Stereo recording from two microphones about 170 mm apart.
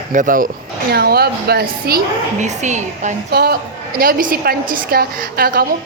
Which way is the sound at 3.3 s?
65° right (ahead or behind).